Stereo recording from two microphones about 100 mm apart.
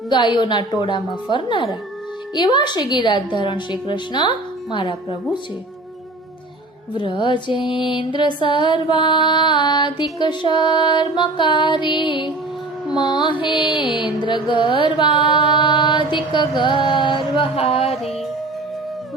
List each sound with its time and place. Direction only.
0.1 s music: 50° left (ahead or behind)
6.9 s music: 55° left (ahead or behind); by 18.1 s 80° left